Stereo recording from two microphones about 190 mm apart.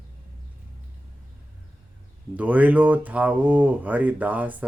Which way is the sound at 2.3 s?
10° right (ahead or behind).